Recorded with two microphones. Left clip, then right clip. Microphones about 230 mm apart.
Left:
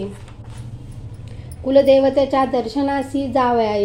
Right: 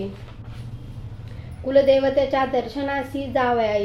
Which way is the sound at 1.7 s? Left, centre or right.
Left.